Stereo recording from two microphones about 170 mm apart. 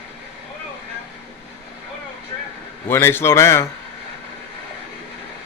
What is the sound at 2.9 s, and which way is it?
Speech, 15° left (ahead or behind).